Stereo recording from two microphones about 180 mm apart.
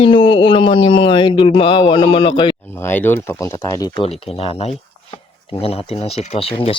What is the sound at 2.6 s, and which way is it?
Speech, 15° left (ahead or behind).